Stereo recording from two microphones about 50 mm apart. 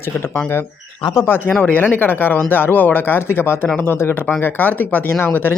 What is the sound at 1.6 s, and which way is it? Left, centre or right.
Speech, left.